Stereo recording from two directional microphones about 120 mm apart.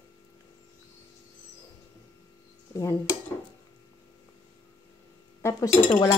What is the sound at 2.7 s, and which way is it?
Speech, 25° left (ahead or behind).